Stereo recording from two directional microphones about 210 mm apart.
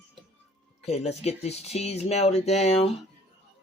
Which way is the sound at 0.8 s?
30° left (ahead or behind).